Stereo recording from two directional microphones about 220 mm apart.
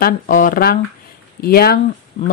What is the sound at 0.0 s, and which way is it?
Speech, 40° left (ahead or behind).